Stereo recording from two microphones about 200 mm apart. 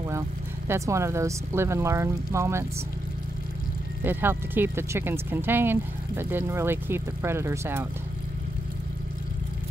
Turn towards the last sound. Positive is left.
turn(degrees=-10)  # may be behind; listen again after turning